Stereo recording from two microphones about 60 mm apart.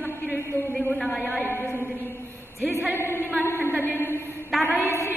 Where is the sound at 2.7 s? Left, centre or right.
Left.